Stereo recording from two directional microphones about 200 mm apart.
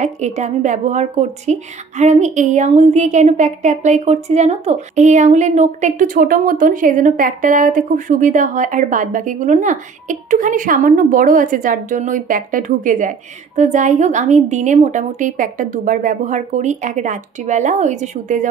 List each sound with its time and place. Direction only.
0.0 s a woman's voice: 35° right (ahead or behind)